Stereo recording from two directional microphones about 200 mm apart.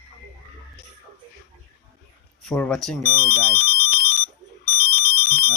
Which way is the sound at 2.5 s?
5° left (ahead or behind).